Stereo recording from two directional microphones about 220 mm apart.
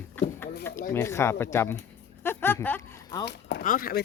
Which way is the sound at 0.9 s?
10° left (ahead or behind).